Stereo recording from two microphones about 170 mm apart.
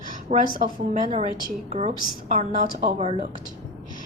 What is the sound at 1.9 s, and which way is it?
A woman's voice, 50° right (ahead or behind).